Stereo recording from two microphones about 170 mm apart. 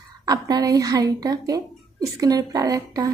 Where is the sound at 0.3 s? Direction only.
20° right (ahead or behind).